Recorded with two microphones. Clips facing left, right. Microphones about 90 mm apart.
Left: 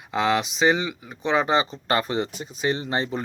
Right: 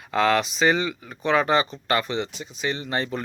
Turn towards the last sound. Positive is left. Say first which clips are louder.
# left 1 dB
turn(degrees=25)  # may be behind; listen again after turning